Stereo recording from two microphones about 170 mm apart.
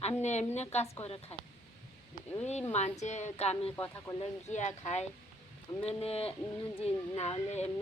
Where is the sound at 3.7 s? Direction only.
15° left (ahead or behind).